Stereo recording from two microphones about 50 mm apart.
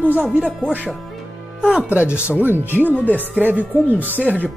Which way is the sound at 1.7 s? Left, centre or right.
Right.